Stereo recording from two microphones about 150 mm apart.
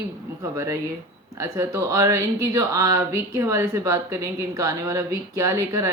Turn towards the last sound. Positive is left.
turn(degrees=-20)  # may be behind; listen again after turning